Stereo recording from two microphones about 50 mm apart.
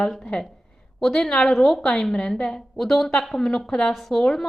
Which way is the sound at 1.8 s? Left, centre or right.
Centre.